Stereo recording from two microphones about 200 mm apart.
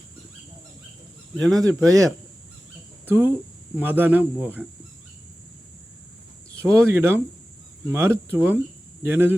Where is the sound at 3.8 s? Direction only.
10° right (ahead or behind).